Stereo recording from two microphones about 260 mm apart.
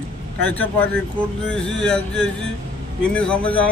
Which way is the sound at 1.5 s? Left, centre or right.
Centre.